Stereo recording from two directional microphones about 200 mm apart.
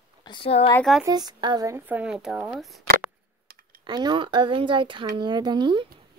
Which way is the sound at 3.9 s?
20° right (ahead or behind).